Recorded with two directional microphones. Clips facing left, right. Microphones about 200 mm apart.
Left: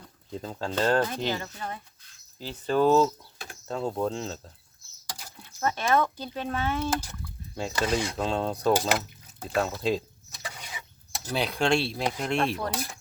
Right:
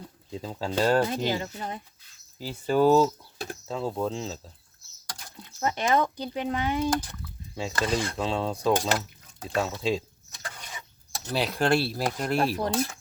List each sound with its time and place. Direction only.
0.3 s speech: 5° right (ahead or behind)
5.4 s speech: 15° right (ahead or behind)
6.9 s speech: 5° left (ahead or behind)
10.4 s a sound: 5° left (ahead or behind)
11.3 s speech: centre (ahead or behind)